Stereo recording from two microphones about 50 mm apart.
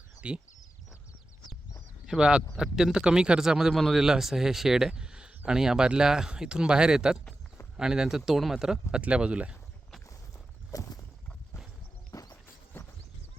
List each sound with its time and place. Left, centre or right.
0.2 s speech: right
2.0 s speech: centre
12.7 s a sound: left